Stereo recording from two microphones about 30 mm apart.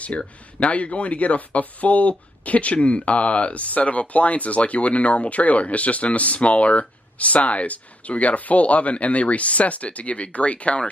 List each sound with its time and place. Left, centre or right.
0.6 s speech: left